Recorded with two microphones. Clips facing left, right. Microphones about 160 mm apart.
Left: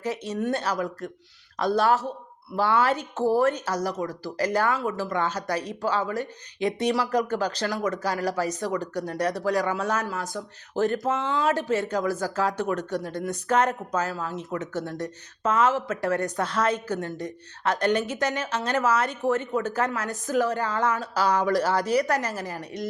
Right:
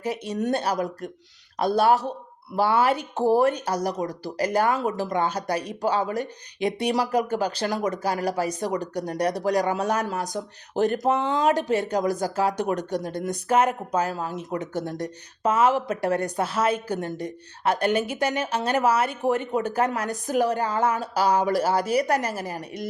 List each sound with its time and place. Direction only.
0.0 s speech: 15° right (ahead or behind)
7.6 s speech: 35° right (ahead or behind)
7.9 s speech: 15° right (ahead or behind)